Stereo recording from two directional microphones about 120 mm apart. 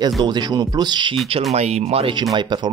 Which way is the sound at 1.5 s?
65° right (ahead or behind).